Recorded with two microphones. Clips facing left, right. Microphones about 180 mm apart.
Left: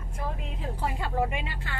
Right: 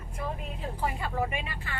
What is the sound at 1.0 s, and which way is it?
Speech, 90° left.